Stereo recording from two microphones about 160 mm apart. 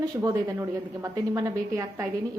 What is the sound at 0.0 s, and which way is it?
A woman's voice, 20° right (ahead or behind).